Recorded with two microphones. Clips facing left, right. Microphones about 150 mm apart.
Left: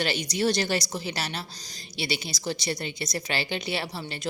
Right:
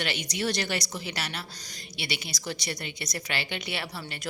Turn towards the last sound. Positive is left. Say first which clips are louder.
# left 4 dB
turn(degrees=30)  # may be behind; listen again after turning